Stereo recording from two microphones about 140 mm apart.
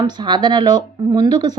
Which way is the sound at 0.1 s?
30° right (ahead or behind).